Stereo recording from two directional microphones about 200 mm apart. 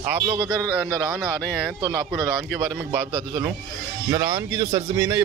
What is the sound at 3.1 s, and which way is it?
Speech, 15° right (ahead or behind).